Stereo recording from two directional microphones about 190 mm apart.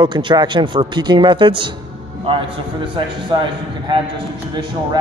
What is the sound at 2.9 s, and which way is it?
Speech, 25° right (ahead or behind).